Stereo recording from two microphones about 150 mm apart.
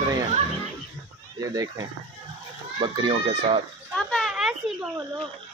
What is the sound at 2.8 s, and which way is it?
Speech, 30° right (ahead or behind).